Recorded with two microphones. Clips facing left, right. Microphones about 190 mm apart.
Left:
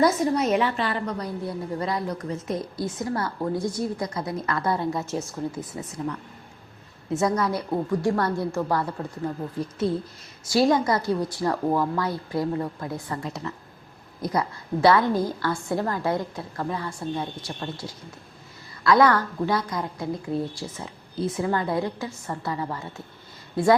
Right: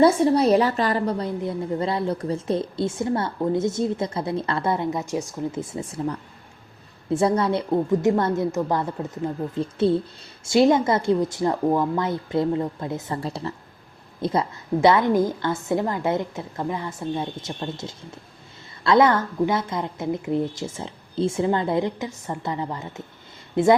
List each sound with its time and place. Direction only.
0.0 s a woman's voice: 30° right (ahead or behind)
1.2 s speech: 25° right (ahead or behind)
5.5 s speech: 25° right (ahead or behind)